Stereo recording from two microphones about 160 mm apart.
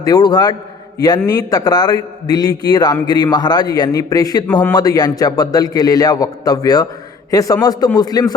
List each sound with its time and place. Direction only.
0.0 s a man's voice: 25° left (ahead or behind)